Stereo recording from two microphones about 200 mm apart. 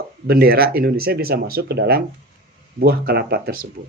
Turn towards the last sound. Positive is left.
turn(degrees=-50)  # may be behind; listen again after turning